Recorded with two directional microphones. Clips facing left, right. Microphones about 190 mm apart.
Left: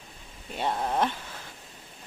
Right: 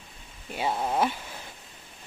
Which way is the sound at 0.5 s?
5° right (ahead or behind).